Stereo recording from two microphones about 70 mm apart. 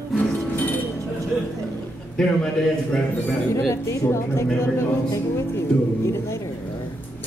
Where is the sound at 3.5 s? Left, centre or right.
Left.